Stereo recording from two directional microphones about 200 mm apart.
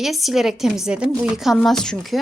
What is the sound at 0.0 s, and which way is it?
Speech, centre (ahead or behind).